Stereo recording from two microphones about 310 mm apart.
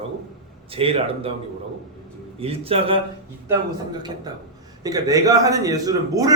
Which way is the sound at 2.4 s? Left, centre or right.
Centre.